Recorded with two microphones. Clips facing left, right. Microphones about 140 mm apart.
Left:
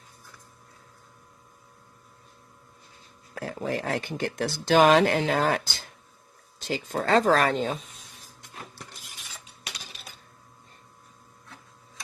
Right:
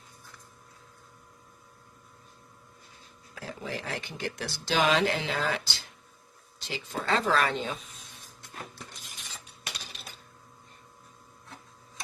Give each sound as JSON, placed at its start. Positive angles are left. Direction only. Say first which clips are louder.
{"t": 3.3, "sound": "speech", "louder": "left 7 dB", "side_deg": 50}